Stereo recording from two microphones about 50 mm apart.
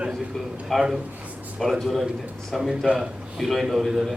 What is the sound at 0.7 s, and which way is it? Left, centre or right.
A man's voice, centre.